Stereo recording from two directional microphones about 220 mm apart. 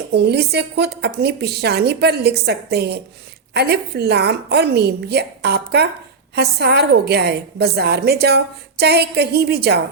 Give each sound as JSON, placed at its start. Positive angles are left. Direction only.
{"t": 0.1, "sound": "a woman's voice", "side_deg": -50}